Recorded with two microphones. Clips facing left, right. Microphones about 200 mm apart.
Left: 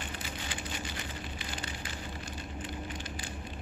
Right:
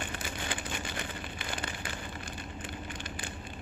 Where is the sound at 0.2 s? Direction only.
55° right (ahead or behind).